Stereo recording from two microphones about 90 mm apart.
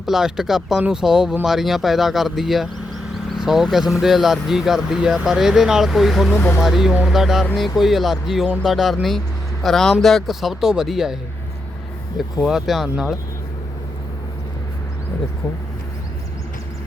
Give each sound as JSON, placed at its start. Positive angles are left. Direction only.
{"t": 0.0, "sound": "speech", "side_deg": -5}
{"t": 6.3, "sound": "speech", "side_deg": 20}
{"t": 6.6, "sound": "speech", "side_deg": -5}